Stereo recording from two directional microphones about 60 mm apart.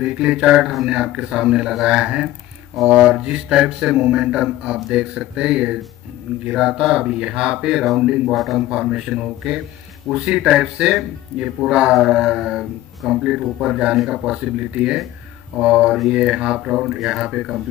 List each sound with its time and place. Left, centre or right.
0.0 s speech: centre
0.6 s speech: centre
0.8 s speech: centre
8.3 s speech: centre
8.5 s speech: centre
16.8 s speech: centre